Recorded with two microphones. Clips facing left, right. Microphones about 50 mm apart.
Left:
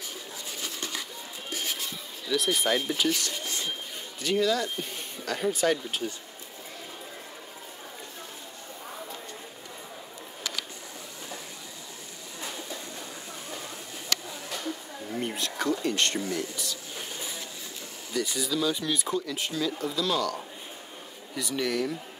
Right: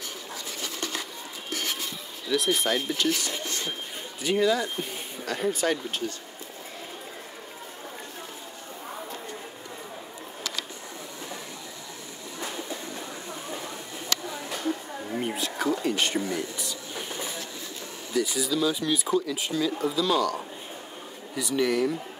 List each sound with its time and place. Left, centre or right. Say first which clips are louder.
2.2 s speech: right 1 dB; centre
4.2 s speech: right 2 dB; centre
5.2 s speech: even; centre
12.4 s train: right 3 dB; right
14.5 s a sound: right 5 dB; centre
15.1 s wild animals: right 2 dB; centre
15.7 s a sound: even; centre
16.2 s a sound: right 2 dB; right
18.1 s speech: right 3 dB; centre
21.4 s speech: right 4 dB; centre